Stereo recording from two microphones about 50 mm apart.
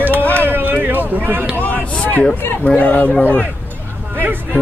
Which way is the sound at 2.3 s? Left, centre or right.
Left.